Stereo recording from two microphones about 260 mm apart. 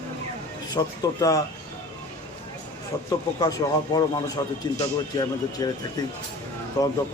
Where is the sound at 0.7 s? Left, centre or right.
Centre.